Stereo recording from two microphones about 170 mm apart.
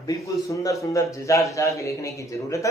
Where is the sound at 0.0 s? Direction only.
20° left (ahead or behind).